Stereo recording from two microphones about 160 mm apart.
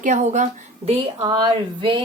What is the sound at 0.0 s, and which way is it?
Speech, 50° right (ahead or behind).